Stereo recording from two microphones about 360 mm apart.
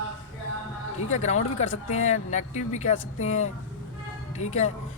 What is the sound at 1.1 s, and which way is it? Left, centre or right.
Speech, centre.